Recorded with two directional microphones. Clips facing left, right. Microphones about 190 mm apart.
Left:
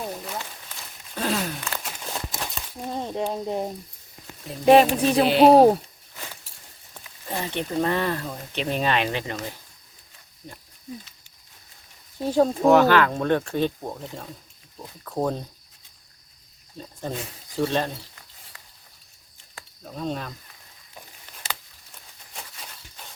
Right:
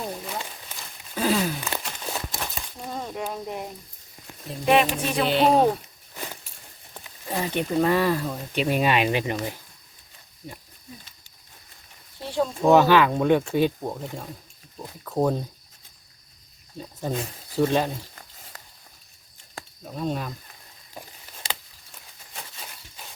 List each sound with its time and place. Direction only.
1.1 s a sound: centre (ahead or behind)
2.9 s a sound: 25° left (ahead or behind)
4.6 s speech: 35° left (ahead or behind)
7.3 s speech: 10° right (ahead or behind)
12.2 s speech: 45° left (ahead or behind)
12.6 s speech: 15° right (ahead or behind)
16.7 s speech: 5° right (ahead or behind)
19.8 s speech: 5° right (ahead or behind)